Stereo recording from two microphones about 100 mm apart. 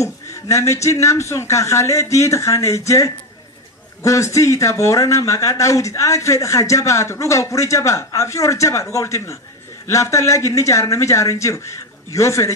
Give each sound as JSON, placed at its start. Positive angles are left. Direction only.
{"t": 0.0, "sound": "speech", "side_deg": 30}